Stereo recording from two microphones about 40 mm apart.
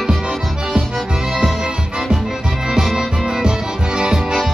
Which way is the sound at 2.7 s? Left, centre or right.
Centre.